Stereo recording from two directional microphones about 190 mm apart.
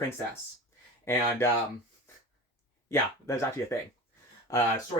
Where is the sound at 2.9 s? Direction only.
15° left (ahead or behind).